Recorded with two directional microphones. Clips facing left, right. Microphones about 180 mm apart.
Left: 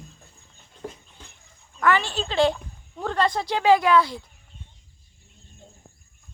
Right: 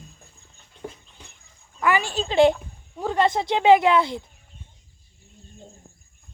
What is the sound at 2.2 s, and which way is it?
Speech, 20° right (ahead or behind).